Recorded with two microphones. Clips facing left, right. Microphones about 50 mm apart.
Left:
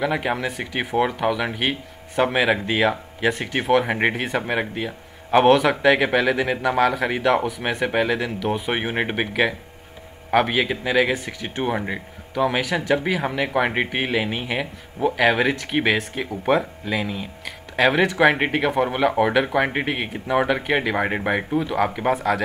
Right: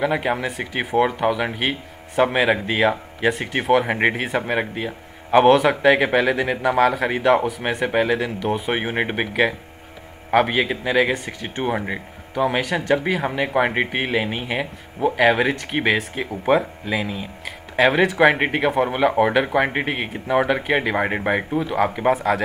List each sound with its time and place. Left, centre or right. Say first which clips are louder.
0.0 s speech: right 2 dB; centre
10.3 s speech: right 1 dB; centre